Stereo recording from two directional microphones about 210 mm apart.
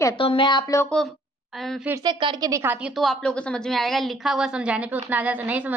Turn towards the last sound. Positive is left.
turn(degrees=-5)  # may be behind; listen again after turning